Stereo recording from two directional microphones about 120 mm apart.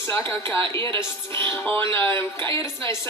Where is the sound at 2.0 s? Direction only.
20° left (ahead or behind).